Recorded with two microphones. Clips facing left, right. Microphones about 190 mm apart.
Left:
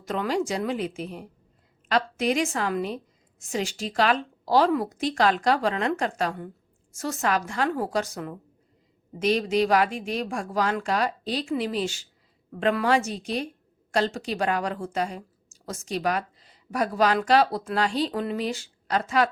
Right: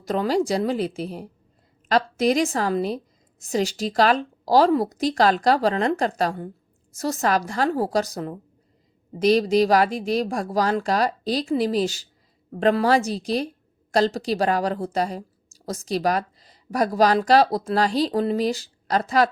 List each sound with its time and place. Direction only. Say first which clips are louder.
0.0 s a woman's voice: right 4 dB; 35° right (ahead or behind)